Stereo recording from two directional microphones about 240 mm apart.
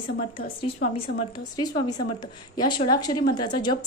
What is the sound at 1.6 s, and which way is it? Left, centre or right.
A woman's voice, centre.